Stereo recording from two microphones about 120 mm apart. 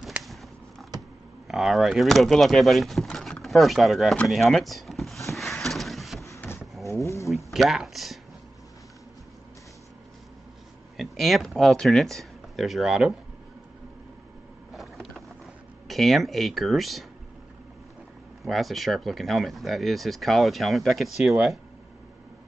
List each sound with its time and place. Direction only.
0.0 s a sound: centre (ahead or behind)
1.5 s speech: centre (ahead or behind)
4.3 s a sound: centre (ahead or behind)
6.9 s speech: 25° left (ahead or behind)
7.2 s a sound: centre (ahead or behind)
11.0 s speech: centre (ahead or behind)
14.7 s vehicle: centre (ahead or behind)
15.9 s speech: centre (ahead or behind)
18.4 s speech: centre (ahead or behind)